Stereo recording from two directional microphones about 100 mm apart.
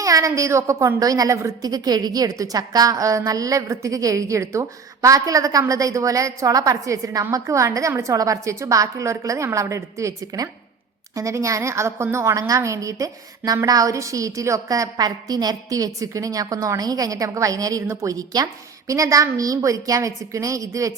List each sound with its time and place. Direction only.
0.0 s a woman's voice: 35° right (ahead or behind)